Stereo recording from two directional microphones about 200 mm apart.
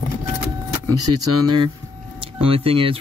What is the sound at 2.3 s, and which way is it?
Speech, 30° right (ahead or behind).